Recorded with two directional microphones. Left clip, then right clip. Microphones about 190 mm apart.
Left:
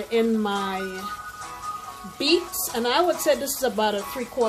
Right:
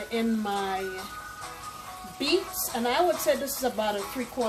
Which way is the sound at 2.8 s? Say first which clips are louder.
Left 3 dB; 55° left (ahead or behind).